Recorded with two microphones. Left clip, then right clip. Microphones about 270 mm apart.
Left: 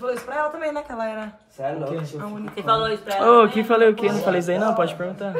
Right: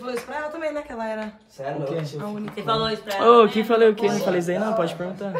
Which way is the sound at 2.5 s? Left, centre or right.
Left.